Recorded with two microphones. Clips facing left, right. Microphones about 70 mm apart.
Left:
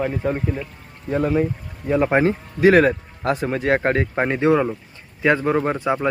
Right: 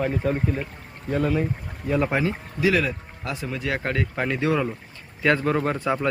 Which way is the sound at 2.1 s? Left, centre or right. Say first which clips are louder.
Left 7 dB; left.